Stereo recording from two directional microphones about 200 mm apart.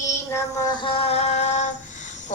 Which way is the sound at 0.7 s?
25° left (ahead or behind).